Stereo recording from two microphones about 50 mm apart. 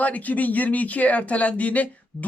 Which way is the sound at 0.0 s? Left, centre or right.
Left.